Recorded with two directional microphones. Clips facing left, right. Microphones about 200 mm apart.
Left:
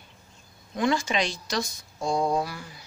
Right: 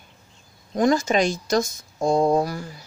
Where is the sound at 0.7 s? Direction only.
40° right (ahead or behind).